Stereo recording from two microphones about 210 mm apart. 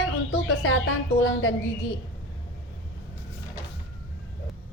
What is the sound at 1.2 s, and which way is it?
Speech, 65° left (ahead or behind).